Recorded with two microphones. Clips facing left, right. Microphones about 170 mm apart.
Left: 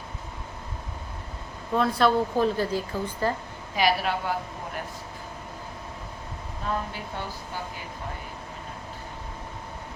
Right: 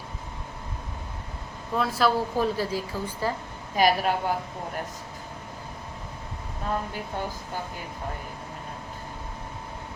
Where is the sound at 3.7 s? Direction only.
45° right (ahead or behind).